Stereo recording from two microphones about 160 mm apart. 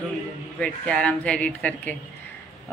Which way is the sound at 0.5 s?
5° left (ahead or behind).